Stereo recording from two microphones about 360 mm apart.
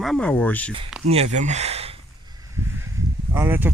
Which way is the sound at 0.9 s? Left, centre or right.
Centre.